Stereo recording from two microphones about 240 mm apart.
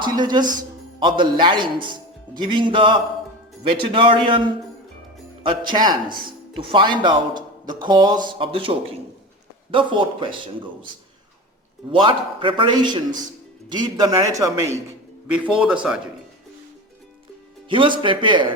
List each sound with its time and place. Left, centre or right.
0.0 s a man's voice: centre
11.9 s a man's voice: right; by 16.0 s centre
17.7 s speech: right